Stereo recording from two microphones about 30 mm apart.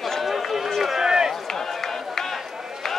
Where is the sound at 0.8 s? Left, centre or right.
Centre.